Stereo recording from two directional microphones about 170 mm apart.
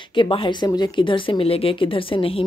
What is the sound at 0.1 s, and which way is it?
Speech, 30° left (ahead or behind).